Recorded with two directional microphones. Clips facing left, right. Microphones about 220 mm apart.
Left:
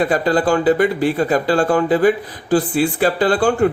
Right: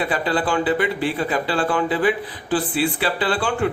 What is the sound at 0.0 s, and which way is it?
A man's voice, 45° left (ahead or behind).